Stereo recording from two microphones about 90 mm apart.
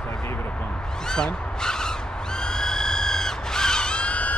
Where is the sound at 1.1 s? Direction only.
5° left (ahead or behind).